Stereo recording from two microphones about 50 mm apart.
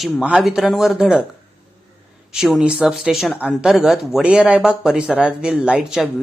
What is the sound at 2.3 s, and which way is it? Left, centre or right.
A woman's voice, centre.